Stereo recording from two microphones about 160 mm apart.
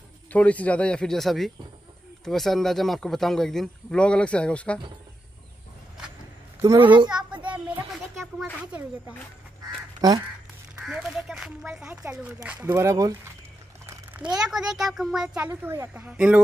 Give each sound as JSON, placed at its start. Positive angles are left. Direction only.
{"t": 0.3, "sound": "speech", "side_deg": 10}
{"t": 6.6, "sound": "a child's voice", "side_deg": -25}
{"t": 7.1, "sound": "child singing", "side_deg": -5}
{"t": 7.4, "sound": "a sound", "side_deg": -10}
{"t": 8.2, "sound": "speech", "side_deg": 0}
{"t": 9.1, "sound": "crow", "side_deg": 10}
{"t": 10.0, "sound": "a child's voice", "side_deg": -25}
{"t": 10.9, "sound": "a child's voice", "side_deg": -5}
{"t": 13.8, "sound": "a child's voice", "side_deg": -10}